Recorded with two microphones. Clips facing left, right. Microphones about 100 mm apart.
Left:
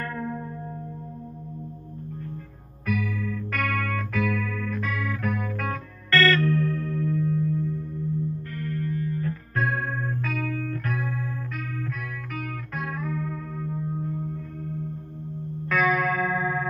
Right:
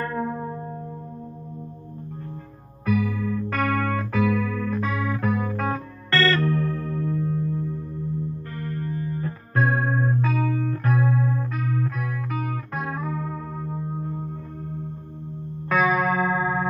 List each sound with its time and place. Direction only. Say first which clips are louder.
0.0 s music: right 4 dB; 25° right (ahead or behind)
2.8 s music: right 5 dB; 30° right (ahead or behind)
15.7 s music: right 2 dB; 25° right (ahead or behind)